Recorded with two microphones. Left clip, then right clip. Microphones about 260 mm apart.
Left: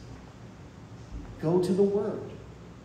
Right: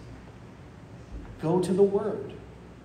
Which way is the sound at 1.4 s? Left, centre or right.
Centre.